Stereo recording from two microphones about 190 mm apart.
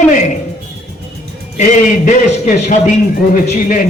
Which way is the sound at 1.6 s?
40° left (ahead or behind).